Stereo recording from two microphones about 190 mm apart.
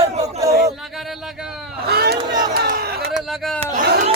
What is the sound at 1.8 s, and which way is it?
Speech, 55° right (ahead or behind).